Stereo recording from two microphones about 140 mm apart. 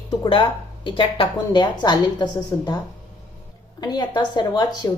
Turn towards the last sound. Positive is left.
turn(degrees=30)  # may be behind; listen again after turning